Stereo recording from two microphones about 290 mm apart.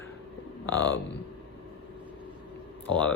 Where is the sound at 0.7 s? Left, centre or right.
Left.